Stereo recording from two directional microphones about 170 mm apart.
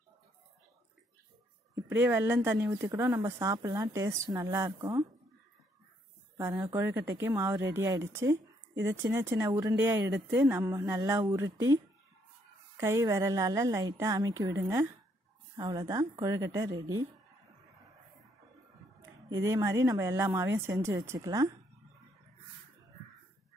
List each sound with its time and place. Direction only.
1.9 s speech: 10° right (ahead or behind)
6.7 s a woman's voice: 15° right (ahead or behind)
15.5 s a woman's voice: 20° right (ahead or behind)
19.2 s a woman's voice: 20° right (ahead or behind)